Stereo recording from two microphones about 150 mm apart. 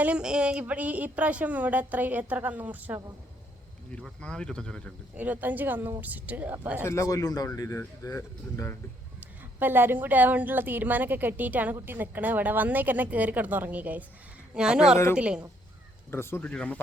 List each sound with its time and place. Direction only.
0.0 s speech: 5° right (ahead or behind)
3.9 s speech: 5° left (ahead or behind)
5.1 s speech: 10° right (ahead or behind)
6.8 s speech: 20° left (ahead or behind)
9.2 s speech: 15° right (ahead or behind)
16.1 s speech: 15° left (ahead or behind)